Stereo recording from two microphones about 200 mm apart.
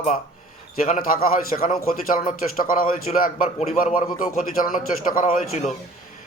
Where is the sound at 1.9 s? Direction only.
45° left (ahead or behind).